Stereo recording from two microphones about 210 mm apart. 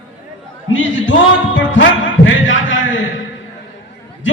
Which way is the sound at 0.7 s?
65° left (ahead or behind).